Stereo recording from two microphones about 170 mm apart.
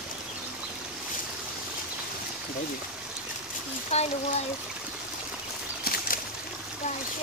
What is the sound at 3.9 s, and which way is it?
Speech, 40° left (ahead or behind).